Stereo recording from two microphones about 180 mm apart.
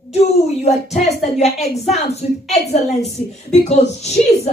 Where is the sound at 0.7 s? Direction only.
40° left (ahead or behind).